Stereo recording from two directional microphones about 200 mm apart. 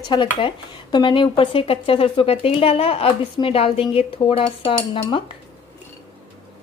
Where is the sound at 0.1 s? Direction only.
25° left (ahead or behind).